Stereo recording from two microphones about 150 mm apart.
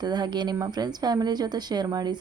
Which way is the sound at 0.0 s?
30° right (ahead or behind).